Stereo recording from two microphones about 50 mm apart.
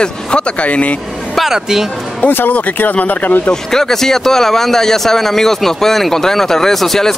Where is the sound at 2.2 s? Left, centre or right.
Left.